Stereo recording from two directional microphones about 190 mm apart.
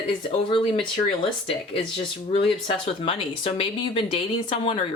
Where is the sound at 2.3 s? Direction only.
30° left (ahead or behind).